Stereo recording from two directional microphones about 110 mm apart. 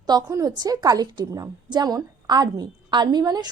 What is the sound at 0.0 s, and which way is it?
A woman's voice, 35° right (ahead or behind).